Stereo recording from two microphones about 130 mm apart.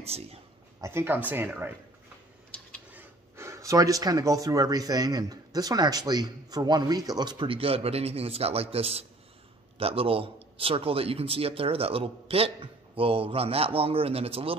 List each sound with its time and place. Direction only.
0.0 s a man's voice: 50° right (ahead or behind)
0.7 s speech: 20° right (ahead or behind)
2.9 s a man's voice: 15° right (ahead or behind); by 14.6 s 45° right (ahead or behind)